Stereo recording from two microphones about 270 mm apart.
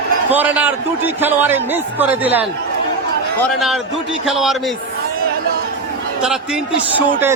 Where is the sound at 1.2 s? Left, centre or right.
Centre.